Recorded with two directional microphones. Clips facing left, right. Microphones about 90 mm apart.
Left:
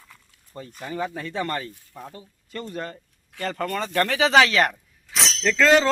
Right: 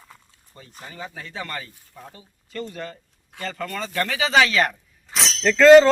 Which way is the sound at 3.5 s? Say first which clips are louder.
Left 3 dB; 50° left (ahead or behind).